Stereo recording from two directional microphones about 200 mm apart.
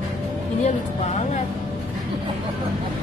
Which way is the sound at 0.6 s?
35° left (ahead or behind).